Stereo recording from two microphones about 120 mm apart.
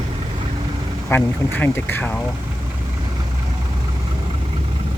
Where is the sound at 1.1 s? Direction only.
15° left (ahead or behind).